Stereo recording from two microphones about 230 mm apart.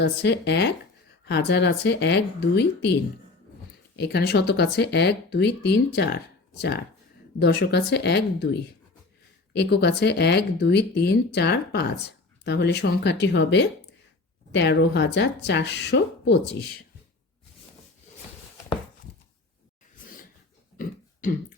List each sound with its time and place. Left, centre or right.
0.0 s speech: left
7.3 s speech: left
20.7 s a sound: left